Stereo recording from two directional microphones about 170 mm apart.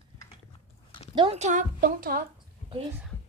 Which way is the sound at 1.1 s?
30° right (ahead or behind).